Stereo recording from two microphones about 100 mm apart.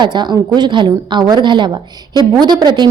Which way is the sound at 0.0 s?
50° right (ahead or behind).